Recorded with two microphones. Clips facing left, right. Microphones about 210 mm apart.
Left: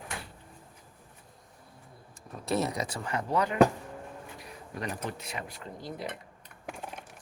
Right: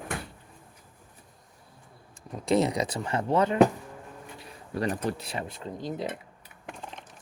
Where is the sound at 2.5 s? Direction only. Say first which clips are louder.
Right 6 dB; 20° right (ahead or behind).